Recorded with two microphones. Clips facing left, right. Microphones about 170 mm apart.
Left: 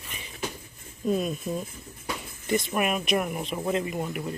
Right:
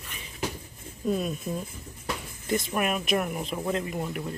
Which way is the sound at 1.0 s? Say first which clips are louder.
Left 1 dB; centre (ahead or behind).